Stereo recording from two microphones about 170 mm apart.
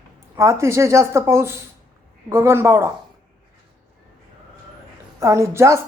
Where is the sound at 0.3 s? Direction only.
15° right (ahead or behind).